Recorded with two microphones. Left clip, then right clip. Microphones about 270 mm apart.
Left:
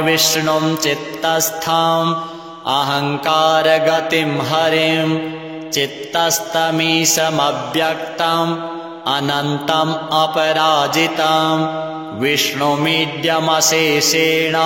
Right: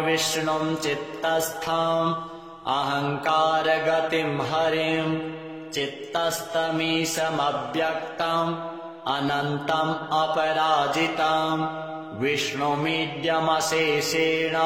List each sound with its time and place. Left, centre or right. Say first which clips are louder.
0.0 s mantra: left 9 dB; left